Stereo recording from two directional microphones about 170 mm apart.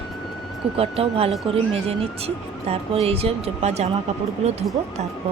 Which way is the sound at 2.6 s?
35° right (ahead or behind).